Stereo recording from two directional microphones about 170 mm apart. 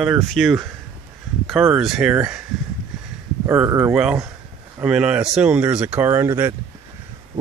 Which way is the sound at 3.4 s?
10° right (ahead or behind).